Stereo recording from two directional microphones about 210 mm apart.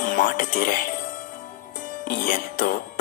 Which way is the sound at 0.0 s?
40° left (ahead or behind).